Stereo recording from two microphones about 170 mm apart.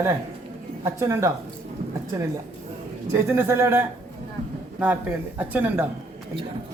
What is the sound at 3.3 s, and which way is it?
Speech, 15° right (ahead or behind).